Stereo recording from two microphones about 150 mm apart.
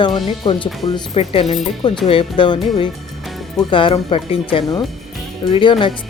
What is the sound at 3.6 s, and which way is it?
Speech, 35° left (ahead or behind).